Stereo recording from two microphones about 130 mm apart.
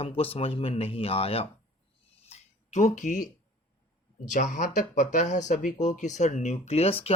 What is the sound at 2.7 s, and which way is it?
Speech, 70° left (ahead or behind).